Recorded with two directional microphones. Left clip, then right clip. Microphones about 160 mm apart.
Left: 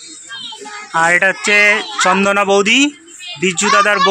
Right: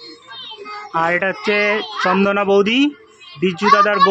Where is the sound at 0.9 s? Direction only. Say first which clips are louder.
Left 6 dB; centre (ahead or behind).